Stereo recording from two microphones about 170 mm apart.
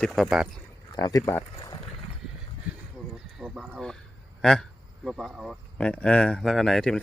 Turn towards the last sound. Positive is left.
turn(degrees=5)  # may be behind; listen again after turning